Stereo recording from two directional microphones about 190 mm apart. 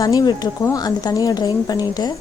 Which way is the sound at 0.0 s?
20° left (ahead or behind).